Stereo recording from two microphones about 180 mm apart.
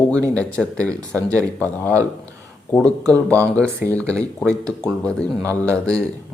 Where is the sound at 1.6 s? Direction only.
10° left (ahead or behind).